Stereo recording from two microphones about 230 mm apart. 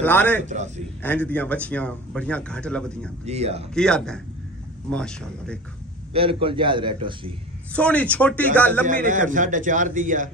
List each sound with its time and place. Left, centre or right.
0.0 s speech: centre
0.5 s a man's voice: right
1.0 s speech: centre
3.3 s a man's voice: right
3.7 s speech: centre
6.1 s a man's voice: right
7.7 s speech: centre
8.8 s a man's voice: right